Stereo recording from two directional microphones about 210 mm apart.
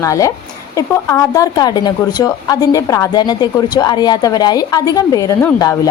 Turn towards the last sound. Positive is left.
turn(degrees=15)  # may be behind; listen again after turning